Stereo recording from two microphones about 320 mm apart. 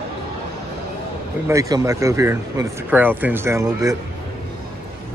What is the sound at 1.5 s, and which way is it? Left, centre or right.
Speech, centre.